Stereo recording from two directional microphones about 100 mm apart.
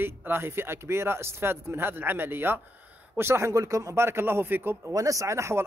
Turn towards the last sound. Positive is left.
turn(degrees=-30)  # may be behind; listen again after turning